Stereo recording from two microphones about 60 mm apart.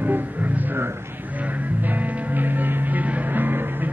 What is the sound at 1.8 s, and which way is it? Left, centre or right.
Music, right.